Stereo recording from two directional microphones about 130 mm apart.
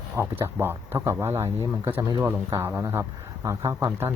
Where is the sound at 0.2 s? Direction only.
15° right (ahead or behind).